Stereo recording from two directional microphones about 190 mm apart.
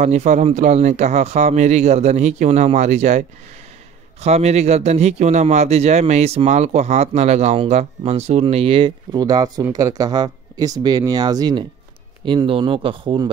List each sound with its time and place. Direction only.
0.0 s speech: 40° right (ahead or behind)